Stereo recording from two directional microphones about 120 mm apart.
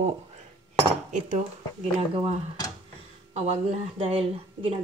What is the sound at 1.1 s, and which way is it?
Cutlery, 80° right.